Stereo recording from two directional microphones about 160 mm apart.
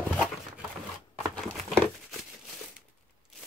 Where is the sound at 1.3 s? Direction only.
Centre (ahead or behind).